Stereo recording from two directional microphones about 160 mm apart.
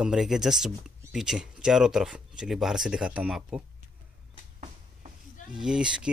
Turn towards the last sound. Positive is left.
turn(degrees=-5)  # may be behind; listen again after turning